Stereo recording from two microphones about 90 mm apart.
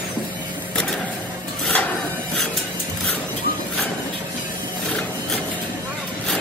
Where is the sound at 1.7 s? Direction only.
15° left (ahead or behind).